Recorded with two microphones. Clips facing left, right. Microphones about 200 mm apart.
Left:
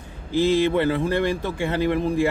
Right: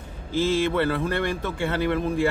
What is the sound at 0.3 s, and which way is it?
Speech, 15° left (ahead or behind).